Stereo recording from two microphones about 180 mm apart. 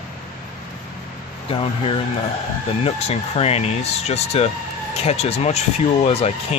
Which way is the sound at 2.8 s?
35° left (ahead or behind).